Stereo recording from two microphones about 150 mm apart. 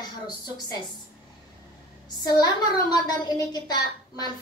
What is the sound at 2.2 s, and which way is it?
A woman's voice, 25° left (ahead or behind).